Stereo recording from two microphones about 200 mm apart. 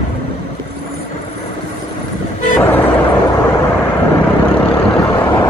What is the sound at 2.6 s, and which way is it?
Vehicle, 10° left (ahead or behind).